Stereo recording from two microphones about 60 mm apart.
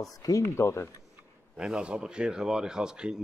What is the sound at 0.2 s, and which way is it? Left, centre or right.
Speech, left.